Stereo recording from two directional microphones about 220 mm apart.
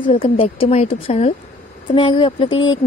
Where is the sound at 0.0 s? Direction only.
25° left (ahead or behind).